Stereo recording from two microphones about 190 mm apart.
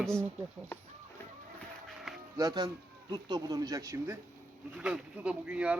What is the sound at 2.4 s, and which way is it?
Speech, 20° right (ahead or behind).